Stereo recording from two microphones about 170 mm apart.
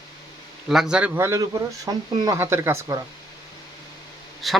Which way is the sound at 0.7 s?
5° right (ahead or behind).